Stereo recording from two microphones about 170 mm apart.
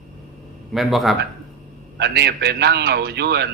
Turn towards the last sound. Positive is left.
turn(degrees=-75)  # may be behind; listen again after turning